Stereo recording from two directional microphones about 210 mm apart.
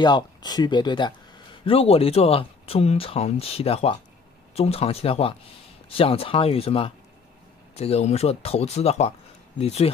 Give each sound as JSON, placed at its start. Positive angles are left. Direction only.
{"t": 0.0, "sound": "speech", "side_deg": 20}